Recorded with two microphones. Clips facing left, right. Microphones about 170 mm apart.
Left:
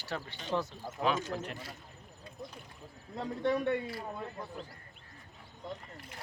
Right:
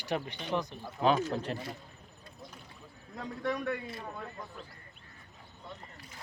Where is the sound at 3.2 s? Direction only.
30° left (ahead or behind).